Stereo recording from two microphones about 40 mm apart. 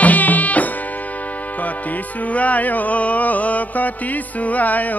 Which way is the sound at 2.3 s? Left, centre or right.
Left.